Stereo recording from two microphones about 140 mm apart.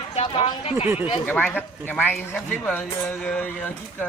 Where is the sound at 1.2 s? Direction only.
10° left (ahead or behind).